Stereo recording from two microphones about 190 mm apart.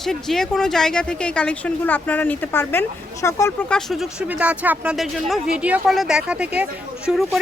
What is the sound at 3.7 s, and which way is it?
A woman's voice, centre (ahead or behind).